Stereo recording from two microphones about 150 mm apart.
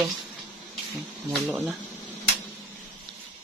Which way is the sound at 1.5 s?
15° right (ahead or behind).